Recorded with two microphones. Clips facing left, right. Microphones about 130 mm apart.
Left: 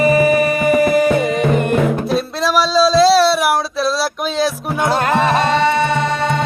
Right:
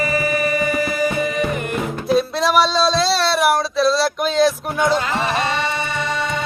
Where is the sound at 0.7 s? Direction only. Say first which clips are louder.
Left 8 dB; 60° left (ahead or behind).